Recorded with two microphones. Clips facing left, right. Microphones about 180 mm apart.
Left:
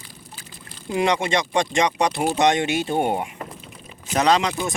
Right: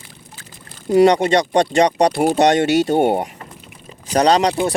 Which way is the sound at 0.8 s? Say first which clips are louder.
Right 9 dB; 40° right (ahead or behind).